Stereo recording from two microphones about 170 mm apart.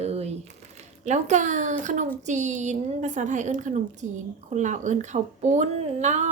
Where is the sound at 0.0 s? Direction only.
40° right (ahead or behind).